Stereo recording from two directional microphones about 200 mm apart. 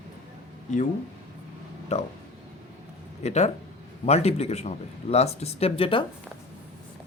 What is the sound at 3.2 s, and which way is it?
Speech, 35° left (ahead or behind).